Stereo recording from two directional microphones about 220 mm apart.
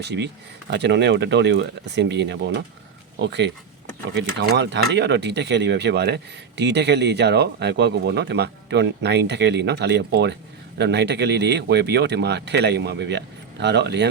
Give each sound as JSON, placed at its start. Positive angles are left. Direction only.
{"t": 0.0, "sound": "speech", "side_deg": -50}